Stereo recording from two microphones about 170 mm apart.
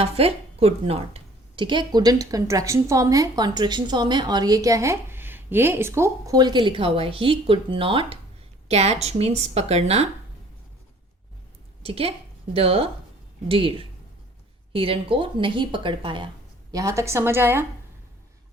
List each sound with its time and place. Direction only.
0.0 s a woman's voice: 35° right (ahead or behind)
11.8 s a woman's voice: 35° right (ahead or behind)
16.7 s a woman's voice: 20° right (ahead or behind)